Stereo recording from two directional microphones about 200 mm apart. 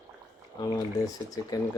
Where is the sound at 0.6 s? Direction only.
20° left (ahead or behind).